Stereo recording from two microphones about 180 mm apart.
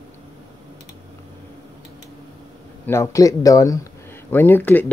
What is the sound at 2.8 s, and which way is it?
Speech, 15° left (ahead or behind).